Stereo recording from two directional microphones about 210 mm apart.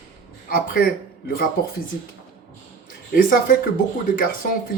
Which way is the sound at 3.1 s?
40° left (ahead or behind).